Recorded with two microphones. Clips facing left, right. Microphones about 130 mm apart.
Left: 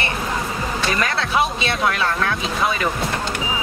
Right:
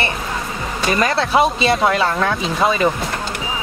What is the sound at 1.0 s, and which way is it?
Music, 35° right (ahead or behind).